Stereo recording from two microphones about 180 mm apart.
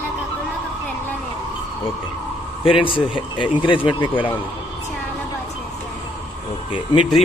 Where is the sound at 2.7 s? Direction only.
30° left (ahead or behind).